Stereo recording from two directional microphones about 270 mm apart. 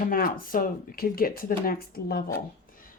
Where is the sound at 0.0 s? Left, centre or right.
Left.